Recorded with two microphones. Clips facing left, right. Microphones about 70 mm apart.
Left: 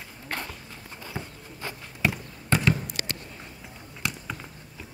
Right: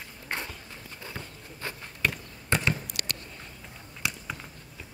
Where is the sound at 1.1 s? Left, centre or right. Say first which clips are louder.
Left 3 dB; centre.